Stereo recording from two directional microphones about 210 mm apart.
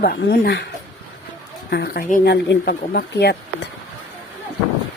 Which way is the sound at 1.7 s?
45° left (ahead or behind).